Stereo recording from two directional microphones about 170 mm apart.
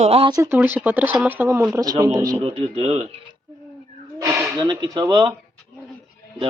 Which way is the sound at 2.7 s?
35° right (ahead or behind).